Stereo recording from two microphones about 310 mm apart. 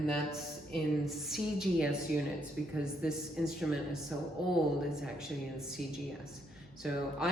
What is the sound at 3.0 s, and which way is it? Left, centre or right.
Speech, centre.